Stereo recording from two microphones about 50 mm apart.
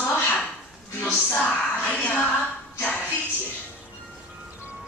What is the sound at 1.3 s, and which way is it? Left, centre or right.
Speech, left.